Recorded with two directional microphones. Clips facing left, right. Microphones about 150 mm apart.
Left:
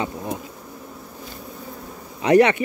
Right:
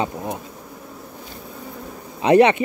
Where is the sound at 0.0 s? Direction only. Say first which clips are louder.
Right 2 dB; 20° right (ahead or behind).